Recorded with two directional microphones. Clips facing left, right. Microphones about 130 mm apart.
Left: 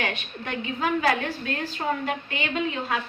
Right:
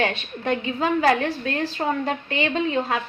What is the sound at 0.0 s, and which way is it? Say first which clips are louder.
A woman's voice: right 6 dB; 30° right (ahead or behind).